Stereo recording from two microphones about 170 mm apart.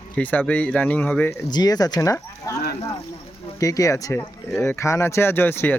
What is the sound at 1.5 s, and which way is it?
Speech, 25° left (ahead or behind).